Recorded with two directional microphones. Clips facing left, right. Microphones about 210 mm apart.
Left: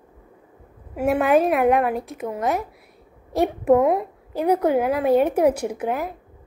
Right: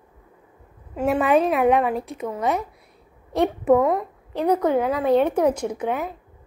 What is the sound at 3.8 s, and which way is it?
A woman's voice, 15° left (ahead or behind).